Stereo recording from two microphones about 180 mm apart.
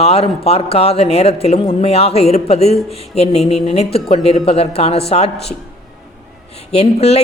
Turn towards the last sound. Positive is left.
turn(degrees=35)  # may be behind; listen again after turning